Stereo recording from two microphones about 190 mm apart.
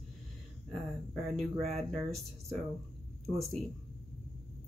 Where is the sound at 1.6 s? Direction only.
35° right (ahead or behind).